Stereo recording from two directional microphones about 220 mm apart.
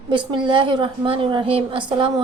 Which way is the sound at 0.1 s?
20° right (ahead or behind).